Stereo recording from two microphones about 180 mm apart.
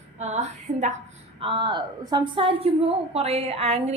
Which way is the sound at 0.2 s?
40° right (ahead or behind).